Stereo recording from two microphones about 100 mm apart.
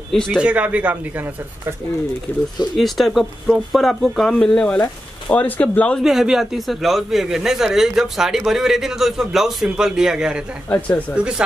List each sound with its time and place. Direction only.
0.1 s speech: 5° left (ahead or behind)
0.4 s speech: 10° right (ahead or behind)
2.7 s speech: centre (ahead or behind)
6.0 s speech: 5° right (ahead or behind)
10.7 s speech: 15° left (ahead or behind)
11.1 s speech: 10° right (ahead or behind)